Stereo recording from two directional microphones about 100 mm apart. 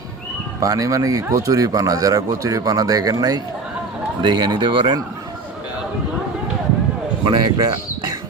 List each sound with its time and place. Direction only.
0.6 s speech: 35° right (ahead or behind); by 4.9 s 55° right (ahead or behind)
7.3 s speech: 50° right (ahead or behind)